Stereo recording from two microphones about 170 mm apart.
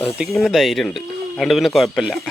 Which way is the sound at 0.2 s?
Centre (ahead or behind).